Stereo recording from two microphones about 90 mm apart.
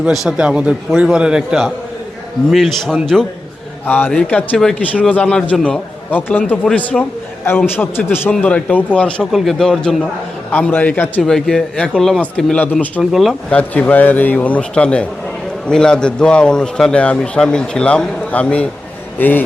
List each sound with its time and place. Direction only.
0.1 s a man's voice: 5° right (ahead or behind)
3.8 s a man's voice: 20° left (ahead or behind)
4.1 s a man's voice: 10° left (ahead or behind)
6.9 s speech: 5° left (ahead or behind)
7.8 s a man's voice: 25° left (ahead or behind)
8.3 s a man's voice: 10° left (ahead or behind)
9.3 s speech: centre (ahead or behind)
10.5 s a man's voice: 20° left (ahead or behind)
11.2 s speech: 5° left (ahead or behind)
13.5 s a man's voice: 15° left (ahead or behind)